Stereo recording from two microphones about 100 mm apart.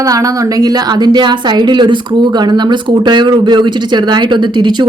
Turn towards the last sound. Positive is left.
turn(degrees=-50)  # may be behind; listen again after turning